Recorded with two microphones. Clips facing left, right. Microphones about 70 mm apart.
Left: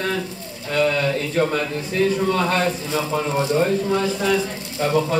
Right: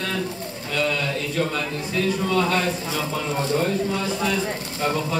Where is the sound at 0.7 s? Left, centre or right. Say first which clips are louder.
Left 5 dB; left.